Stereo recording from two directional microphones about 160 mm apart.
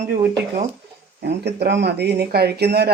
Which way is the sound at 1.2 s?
90° right.